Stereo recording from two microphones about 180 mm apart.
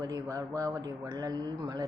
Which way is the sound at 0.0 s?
20° right (ahead or behind).